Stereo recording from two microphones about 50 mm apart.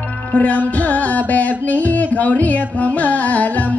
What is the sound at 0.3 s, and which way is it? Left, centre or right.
Music, left.